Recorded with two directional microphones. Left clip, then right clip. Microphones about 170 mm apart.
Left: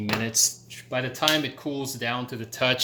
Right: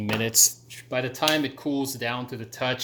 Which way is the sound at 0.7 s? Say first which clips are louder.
Right 1 dB; 30° right (ahead or behind).